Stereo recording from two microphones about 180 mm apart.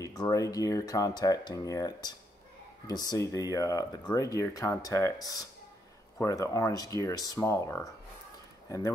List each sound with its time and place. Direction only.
0.0 s speech: 20° left (ahead or behind)